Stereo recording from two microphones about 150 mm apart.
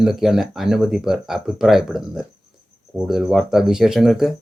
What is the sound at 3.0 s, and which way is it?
A man's voice, 5° right (ahead or behind).